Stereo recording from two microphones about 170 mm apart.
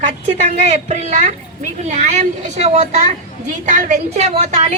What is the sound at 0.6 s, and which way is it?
A child's voice, 40° right (ahead or behind).